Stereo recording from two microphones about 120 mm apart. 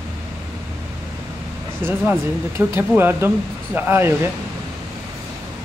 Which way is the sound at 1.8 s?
15° right (ahead or behind).